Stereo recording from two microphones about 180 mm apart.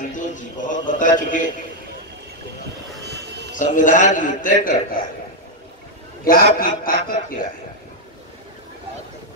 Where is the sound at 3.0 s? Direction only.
70° right (ahead or behind).